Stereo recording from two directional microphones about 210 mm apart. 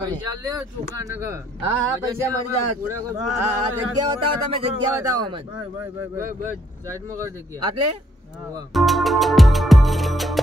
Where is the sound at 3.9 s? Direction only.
25° right (ahead or behind).